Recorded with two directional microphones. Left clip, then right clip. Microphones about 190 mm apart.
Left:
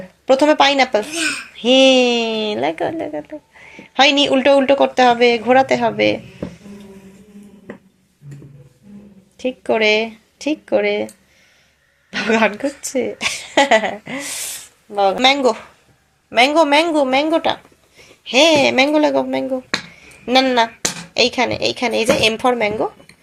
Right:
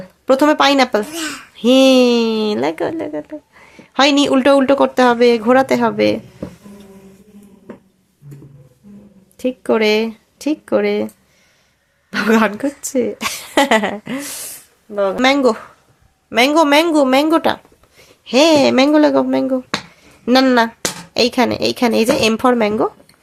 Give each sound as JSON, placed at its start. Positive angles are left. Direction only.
{"t": 0.3, "sound": "speech", "side_deg": -35}
{"t": 9.4, "sound": "speech", "side_deg": -35}
{"t": 12.1, "sound": "speech", "side_deg": -35}
{"t": 20.0, "sound": "a sound", "side_deg": -45}
{"t": 21.1, "sound": "speech", "side_deg": -45}